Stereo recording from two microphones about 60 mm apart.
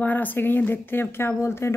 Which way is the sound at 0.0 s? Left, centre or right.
Left.